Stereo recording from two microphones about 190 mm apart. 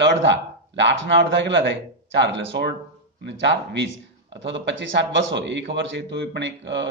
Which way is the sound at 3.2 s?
70° right (ahead or behind).